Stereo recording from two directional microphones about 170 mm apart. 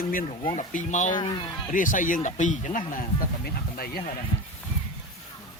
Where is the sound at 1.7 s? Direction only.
50° left (ahead or behind).